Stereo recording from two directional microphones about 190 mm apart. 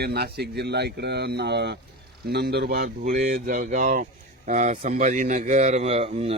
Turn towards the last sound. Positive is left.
turn(degrees=-35)  # may be behind; listen again after turning